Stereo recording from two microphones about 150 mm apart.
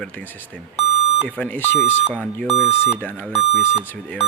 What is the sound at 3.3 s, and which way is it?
Speech, 40° left (ahead or behind).